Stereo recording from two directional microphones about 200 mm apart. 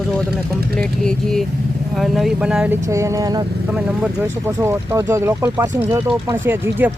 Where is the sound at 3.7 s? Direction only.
5° right (ahead or behind).